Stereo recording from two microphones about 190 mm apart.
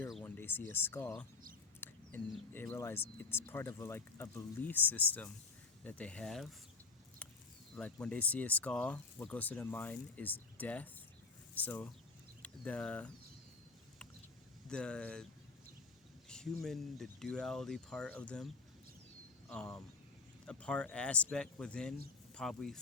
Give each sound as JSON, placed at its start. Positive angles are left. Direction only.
{"t": 0.1, "sound": "speech", "side_deg": 5}
{"t": 2.5, "sound": "speech", "side_deg": 10}
{"t": 7.8, "sound": "speech", "side_deg": 5}
{"t": 14.7, "sound": "speech", "side_deg": 5}
{"t": 16.3, "sound": "speech", "side_deg": 5}